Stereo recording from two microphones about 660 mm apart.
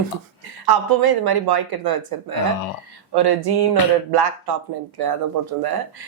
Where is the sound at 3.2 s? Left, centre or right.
Right.